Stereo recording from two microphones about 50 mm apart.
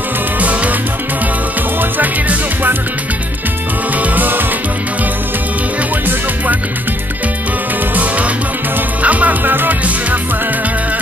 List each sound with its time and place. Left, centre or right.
0.4 s music: right
1.8 s music: right
4.0 s music: right
7.9 s music: right